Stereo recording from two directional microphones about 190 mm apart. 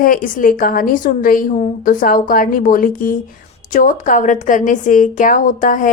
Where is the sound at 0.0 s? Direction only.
45° left (ahead or behind).